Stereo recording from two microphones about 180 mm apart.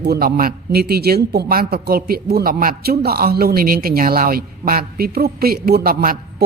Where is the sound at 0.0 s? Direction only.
60° right (ahead or behind).